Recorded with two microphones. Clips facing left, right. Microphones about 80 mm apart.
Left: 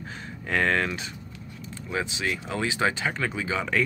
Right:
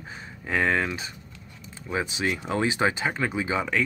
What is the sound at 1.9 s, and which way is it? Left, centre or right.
Speech, right.